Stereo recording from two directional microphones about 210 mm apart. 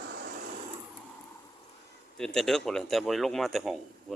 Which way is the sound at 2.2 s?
5° left (ahead or behind).